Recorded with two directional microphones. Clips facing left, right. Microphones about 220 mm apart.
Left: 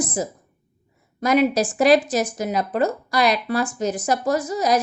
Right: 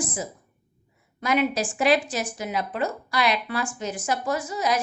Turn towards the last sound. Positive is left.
turn(degrees=40)  # may be behind; listen again after turning